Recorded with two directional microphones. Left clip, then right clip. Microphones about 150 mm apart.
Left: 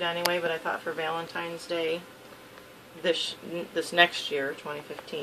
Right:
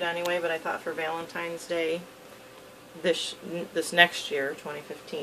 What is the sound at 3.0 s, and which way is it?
Speech, 15° right (ahead or behind).